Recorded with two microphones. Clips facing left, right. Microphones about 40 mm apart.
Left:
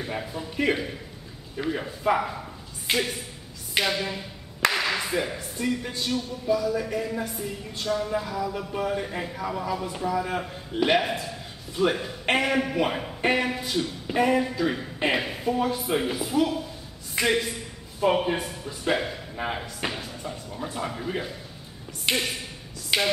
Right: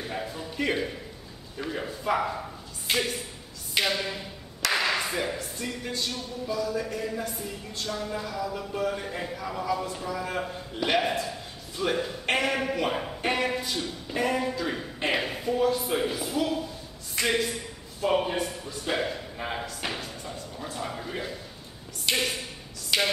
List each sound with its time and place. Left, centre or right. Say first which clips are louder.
0.2 s a man's voice: left 3 dB; centre
22.1 s speech: left 1 dB; left
22.9 s music: left 1 dB; centre